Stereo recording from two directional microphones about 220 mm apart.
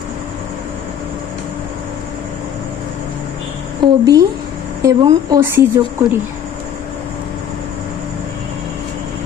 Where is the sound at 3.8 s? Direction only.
20° right (ahead or behind).